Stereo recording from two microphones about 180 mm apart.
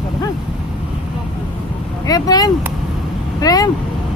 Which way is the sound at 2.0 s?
20° left (ahead or behind).